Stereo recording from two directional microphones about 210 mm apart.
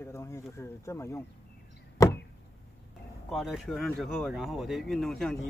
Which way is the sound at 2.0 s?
15° left (ahead or behind).